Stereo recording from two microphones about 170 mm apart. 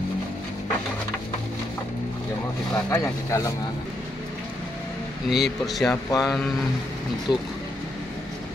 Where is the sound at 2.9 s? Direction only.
15° left (ahead or behind).